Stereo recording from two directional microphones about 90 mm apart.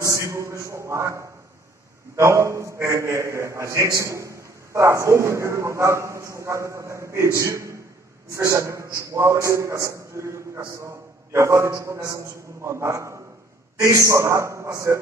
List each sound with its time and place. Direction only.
0.0 s a man's voice: 35° right (ahead or behind)